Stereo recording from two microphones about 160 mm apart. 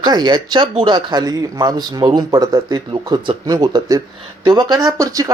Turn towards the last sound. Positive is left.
turn(degrees=-20)  # may be behind; listen again after turning